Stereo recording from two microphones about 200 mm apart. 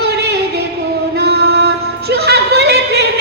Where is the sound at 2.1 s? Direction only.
55° right (ahead or behind).